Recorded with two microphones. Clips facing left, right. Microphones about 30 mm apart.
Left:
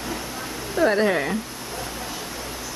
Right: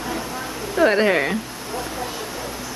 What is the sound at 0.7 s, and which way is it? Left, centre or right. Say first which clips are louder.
Speech: right 3 dB; right.